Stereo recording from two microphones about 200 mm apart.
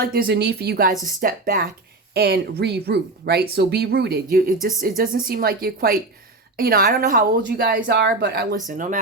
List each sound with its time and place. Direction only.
0.0 s speech: 45° right (ahead or behind)